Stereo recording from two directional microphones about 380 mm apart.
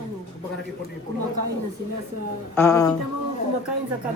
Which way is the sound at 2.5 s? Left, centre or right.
Centre.